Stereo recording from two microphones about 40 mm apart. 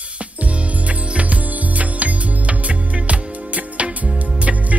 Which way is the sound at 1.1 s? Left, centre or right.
Right.